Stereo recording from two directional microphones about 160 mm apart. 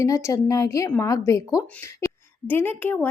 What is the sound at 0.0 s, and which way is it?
Speech, 20° left (ahead or behind).